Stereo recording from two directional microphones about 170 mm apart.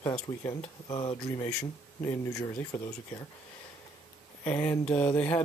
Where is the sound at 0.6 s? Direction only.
30° left (ahead or behind).